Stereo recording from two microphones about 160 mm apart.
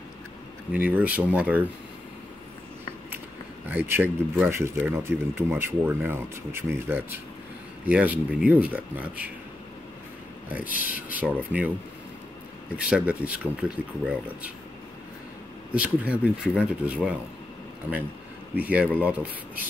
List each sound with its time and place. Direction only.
0.8 s speech: 10° right (ahead or behind)
3.7 s speech: 15° right (ahead or behind)
11.0 s speech: 10° right (ahead or behind)
12.7 s speech: 10° right (ahead or behind)
15.7 s speech: 10° right (ahead or behind)
17.9 s speech: 15° left (ahead or behind)
18.5 s speech: 10° right (ahead or behind)